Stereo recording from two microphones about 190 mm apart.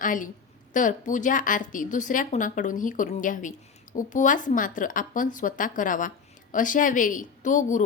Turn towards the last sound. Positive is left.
turn(degrees=40)  # may be behind; listen again after turning